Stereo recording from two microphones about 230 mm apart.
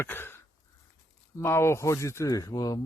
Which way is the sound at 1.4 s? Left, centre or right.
Centre.